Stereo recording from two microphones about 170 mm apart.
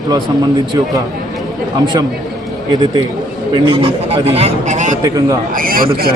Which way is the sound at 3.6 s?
35° right (ahead or behind).